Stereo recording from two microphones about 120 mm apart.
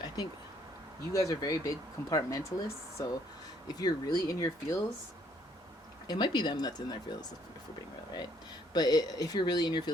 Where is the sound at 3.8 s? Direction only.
35° left (ahead or behind).